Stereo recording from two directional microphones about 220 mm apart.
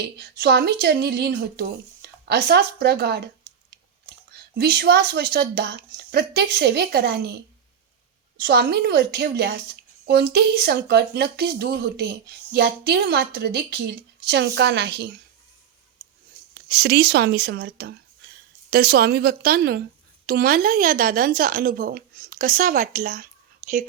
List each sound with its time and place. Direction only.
0.0 s speech: 45° right (ahead or behind)
4.5 s speech: 45° right (ahead or behind)
8.4 s speech: 45° right (ahead or behind)
16.6 s speech: 45° right (ahead or behind)